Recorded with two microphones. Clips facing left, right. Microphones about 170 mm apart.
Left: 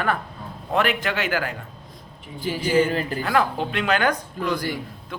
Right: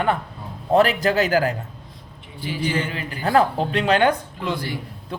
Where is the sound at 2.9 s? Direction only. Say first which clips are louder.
Left 6 dB; 45° left (ahead or behind).